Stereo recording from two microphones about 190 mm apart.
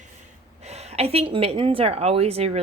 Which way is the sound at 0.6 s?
35° right (ahead or behind).